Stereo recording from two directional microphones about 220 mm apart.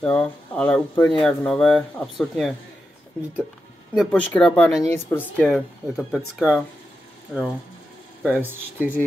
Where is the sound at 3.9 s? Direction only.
5° left (ahead or behind).